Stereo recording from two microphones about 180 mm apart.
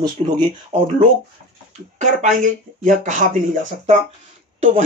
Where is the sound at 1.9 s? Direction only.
45° right (ahead or behind).